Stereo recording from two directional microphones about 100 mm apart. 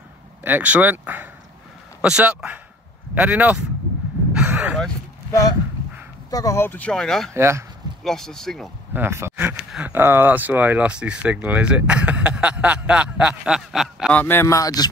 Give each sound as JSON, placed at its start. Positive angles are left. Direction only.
{"t": 0.4, "sound": "speech", "side_deg": -15}
{"t": 4.3, "sound": "a sound", "side_deg": -10}
{"t": 5.3, "sound": "speech", "side_deg": 35}
{"t": 6.7, "sound": "speech", "side_deg": 10}
{"t": 7.3, "sound": "speech", "side_deg": -25}
{"t": 8.0, "sound": "speech", "side_deg": 5}
{"t": 8.9, "sound": "speech", "side_deg": -25}
{"t": 14.1, "sound": "speech", "side_deg": 20}
{"t": 14.5, "sound": "speech", "side_deg": 35}